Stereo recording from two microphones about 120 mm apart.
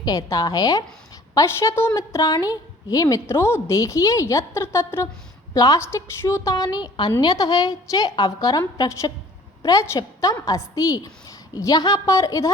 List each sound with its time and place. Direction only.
0.0 s a woman's voice: 30° left (ahead or behind)